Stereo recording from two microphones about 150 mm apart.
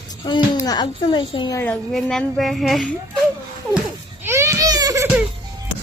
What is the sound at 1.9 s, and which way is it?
Speech, 5° left (ahead or behind).